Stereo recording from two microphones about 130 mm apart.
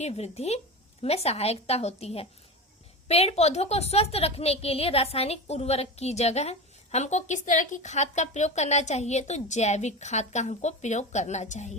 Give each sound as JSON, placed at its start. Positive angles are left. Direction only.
{"t": 0.0, "sound": "a woman's voice", "side_deg": 55}